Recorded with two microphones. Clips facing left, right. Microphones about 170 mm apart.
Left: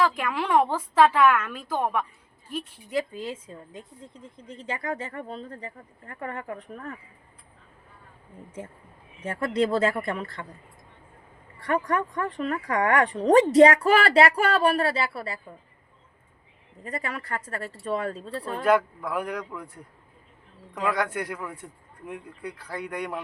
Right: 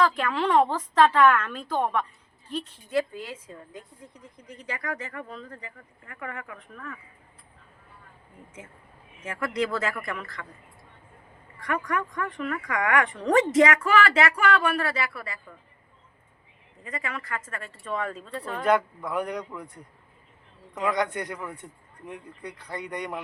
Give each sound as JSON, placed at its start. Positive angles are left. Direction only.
{"t": 0.0, "sound": "a man's voice", "side_deg": 10}
{"t": 3.2, "sound": "a woman's voice", "side_deg": 25}
{"t": 9.2, "sound": "a woman's voice", "side_deg": 30}
{"t": 11.6, "sound": "speech", "side_deg": 30}
{"t": 16.8, "sound": "speech", "side_deg": 35}
{"t": 18.6, "sound": "speech", "side_deg": 5}
{"t": 20.8, "sound": "a man's voice", "side_deg": 5}